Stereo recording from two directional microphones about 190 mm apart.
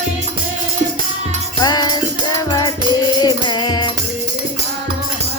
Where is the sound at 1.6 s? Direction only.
20° left (ahead or behind).